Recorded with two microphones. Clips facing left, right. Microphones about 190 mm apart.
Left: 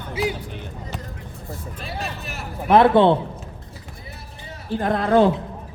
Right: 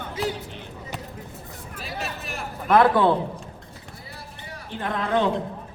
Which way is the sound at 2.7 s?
25° left (ahead or behind).